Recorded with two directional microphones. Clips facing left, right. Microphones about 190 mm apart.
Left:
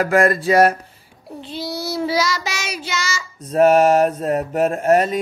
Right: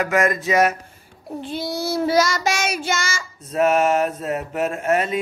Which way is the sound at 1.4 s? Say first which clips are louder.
Right 1 dB; 50° right (ahead or behind).